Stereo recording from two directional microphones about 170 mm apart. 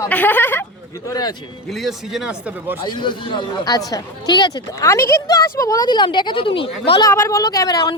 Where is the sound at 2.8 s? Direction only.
25° left (ahead or behind).